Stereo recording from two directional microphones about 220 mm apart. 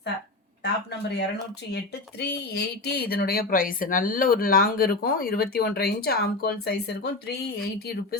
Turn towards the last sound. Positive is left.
turn(degrees=45)  # may be behind; listen again after turning